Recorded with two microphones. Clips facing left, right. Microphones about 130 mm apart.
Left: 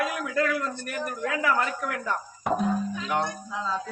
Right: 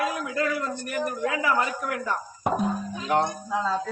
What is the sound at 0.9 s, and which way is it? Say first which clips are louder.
A man's voice: right 4 dB; 15° right (ahead or behind).